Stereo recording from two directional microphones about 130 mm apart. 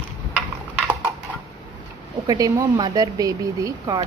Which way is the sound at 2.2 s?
30° right (ahead or behind).